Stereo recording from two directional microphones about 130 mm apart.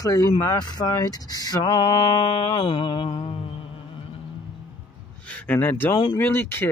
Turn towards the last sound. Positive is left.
turn(degrees=15)  # may be behind; listen again after turning